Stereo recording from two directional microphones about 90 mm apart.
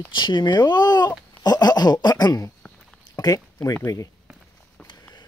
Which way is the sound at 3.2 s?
45° left (ahead or behind).